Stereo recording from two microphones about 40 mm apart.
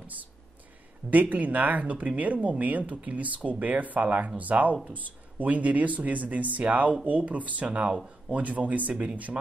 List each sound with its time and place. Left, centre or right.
0.0 s speech: right